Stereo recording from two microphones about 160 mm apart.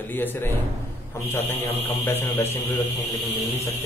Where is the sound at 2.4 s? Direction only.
15° left (ahead or behind).